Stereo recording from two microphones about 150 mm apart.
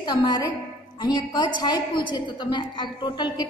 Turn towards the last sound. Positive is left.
turn(degrees=30)  # may be behind; listen again after turning